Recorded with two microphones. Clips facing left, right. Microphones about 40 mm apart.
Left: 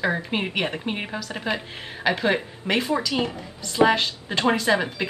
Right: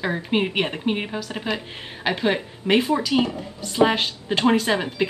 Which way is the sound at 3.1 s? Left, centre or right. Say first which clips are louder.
Right 4 dB; centre.